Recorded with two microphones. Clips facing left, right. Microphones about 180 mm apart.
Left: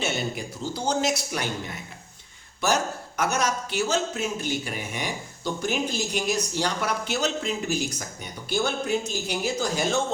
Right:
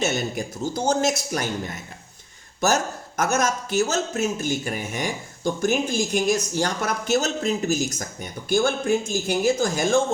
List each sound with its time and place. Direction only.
0.0 s a man's voice: 45° right (ahead or behind)